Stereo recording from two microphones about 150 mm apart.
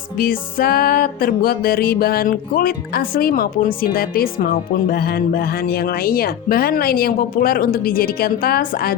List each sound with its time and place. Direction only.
0.2 s music: 75° left (ahead or behind)